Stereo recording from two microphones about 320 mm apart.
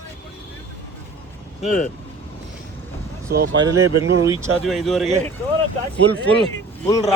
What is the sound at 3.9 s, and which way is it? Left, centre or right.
Speech, right.